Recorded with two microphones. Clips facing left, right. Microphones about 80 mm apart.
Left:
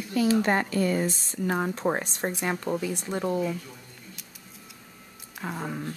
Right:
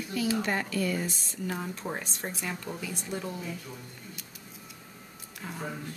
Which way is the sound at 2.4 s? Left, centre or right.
Left.